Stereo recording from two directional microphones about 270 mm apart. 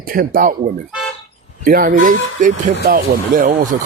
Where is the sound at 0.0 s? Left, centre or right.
Right.